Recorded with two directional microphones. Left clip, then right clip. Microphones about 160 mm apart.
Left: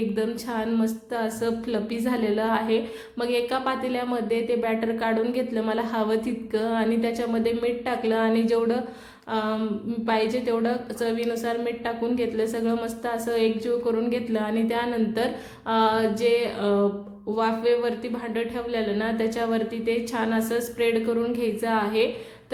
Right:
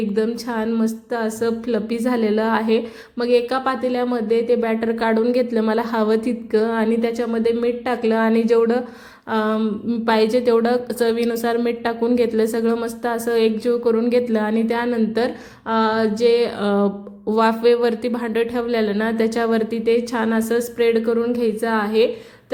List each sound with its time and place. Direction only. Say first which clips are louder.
0.2 s a woman's voice: right 6 dB; 30° right (ahead or behind)